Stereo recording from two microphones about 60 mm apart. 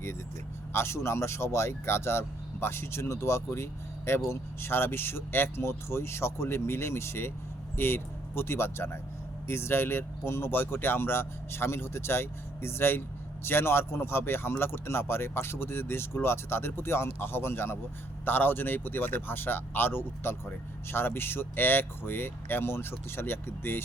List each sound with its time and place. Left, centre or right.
0.7 s speech: left